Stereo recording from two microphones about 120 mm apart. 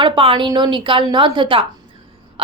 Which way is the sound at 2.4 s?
45° right (ahead or behind).